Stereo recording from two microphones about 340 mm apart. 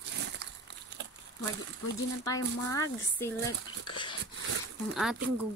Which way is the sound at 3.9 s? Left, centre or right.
Centre.